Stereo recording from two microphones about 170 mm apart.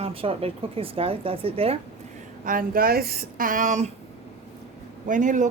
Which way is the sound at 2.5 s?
55° right (ahead or behind).